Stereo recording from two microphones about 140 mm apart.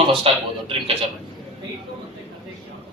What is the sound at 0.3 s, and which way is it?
Speech, 40° right (ahead or behind).